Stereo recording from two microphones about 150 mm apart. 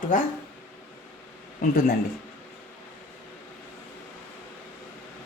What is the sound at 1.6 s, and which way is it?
Speech, 70° left (ahead or behind).